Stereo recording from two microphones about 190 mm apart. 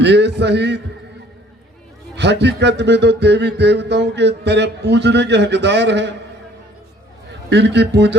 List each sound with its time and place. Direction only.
0.0 s speech: 65° right (ahead or behind)
2.1 s speech: 65° right (ahead or behind)
7.5 s speech: 65° right (ahead or behind)